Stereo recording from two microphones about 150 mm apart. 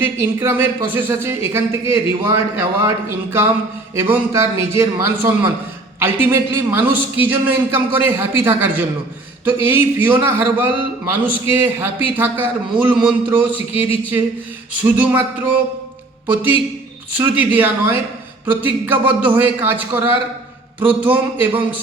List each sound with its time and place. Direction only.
0.0 s a man's voice: 15° right (ahead or behind)
3.9 s a man's voice: 15° right (ahead or behind)
20.7 s speech: 35° right (ahead or behind)
21.1 s a man's voice: 10° right (ahead or behind)